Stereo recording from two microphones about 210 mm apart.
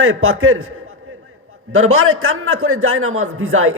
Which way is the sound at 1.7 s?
85° right.